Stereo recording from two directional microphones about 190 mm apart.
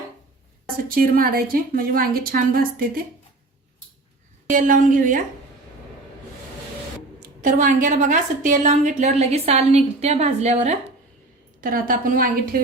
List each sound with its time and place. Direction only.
0.9 s a woman's voice: 50° right (ahead or behind)
4.4 s a woman's voice: 45° right (ahead or behind)
7.2 s a woman's voice: 45° right (ahead or behind)
11.6 s a woman's voice: 50° right (ahead or behind)